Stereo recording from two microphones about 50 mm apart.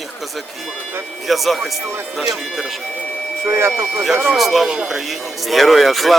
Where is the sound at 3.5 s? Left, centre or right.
Right.